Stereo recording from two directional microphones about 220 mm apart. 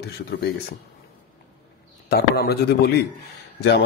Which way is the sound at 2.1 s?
45° left (ahead or behind).